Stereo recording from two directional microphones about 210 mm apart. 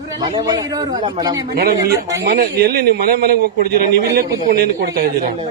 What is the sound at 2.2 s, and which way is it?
A man's voice, 50° right (ahead or behind).